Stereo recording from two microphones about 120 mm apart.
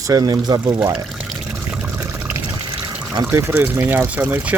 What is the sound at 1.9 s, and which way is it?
Water, 20° right (ahead or behind).